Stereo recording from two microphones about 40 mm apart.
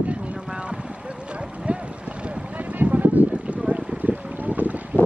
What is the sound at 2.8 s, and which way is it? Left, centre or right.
Boat, right.